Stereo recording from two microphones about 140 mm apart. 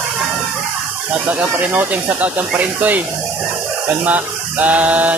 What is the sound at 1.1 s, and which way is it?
Speech, 10° right (ahead or behind).